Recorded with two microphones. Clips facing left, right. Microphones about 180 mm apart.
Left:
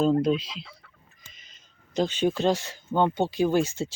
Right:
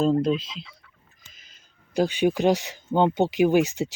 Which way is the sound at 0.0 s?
Centre (ahead or behind).